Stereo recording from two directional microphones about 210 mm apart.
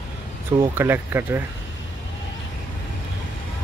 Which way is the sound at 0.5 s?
10° right (ahead or behind).